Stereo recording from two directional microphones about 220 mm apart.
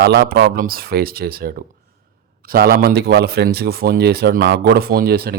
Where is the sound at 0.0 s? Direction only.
50° right (ahead or behind).